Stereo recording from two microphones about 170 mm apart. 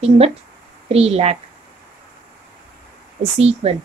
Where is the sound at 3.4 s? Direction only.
35° right (ahead or behind).